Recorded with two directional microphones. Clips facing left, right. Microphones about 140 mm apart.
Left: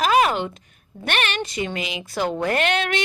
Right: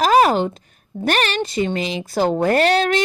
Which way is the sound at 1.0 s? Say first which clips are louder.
Right 5 dB; 40° right (ahead or behind).